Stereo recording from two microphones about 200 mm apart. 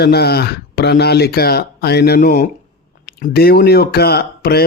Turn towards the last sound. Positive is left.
turn(degrees=50)  # may be behind; listen again after turning